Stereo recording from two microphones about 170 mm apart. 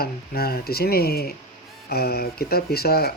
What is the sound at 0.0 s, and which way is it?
Speech, 65° left (ahead or behind).